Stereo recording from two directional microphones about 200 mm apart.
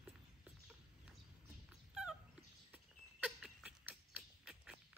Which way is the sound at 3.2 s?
5° right (ahead or behind).